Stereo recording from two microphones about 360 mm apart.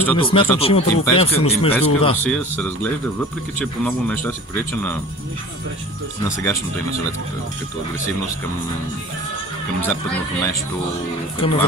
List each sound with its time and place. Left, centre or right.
0.0 s speech: centre
1.7 s speech: centre
6.2 s speech: centre
11.4 s speech: centre